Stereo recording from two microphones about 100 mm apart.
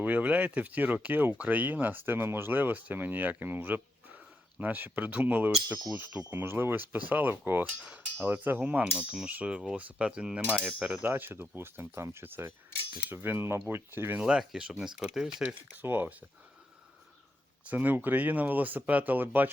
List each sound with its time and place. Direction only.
0.0 s speech: 15° right (ahead or behind)
14.2 s speech: 5° right (ahead or behind)
15.8 s speech: 20° right (ahead or behind)
17.7 s speech: 20° right (ahead or behind)